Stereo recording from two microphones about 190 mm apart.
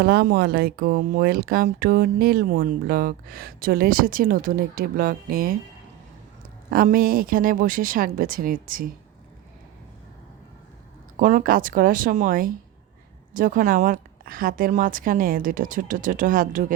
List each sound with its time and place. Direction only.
0.0 s speech: 55° right (ahead or behind)
6.7 s speech: 50° right (ahead or behind)
11.2 s speech: 45° right (ahead or behind)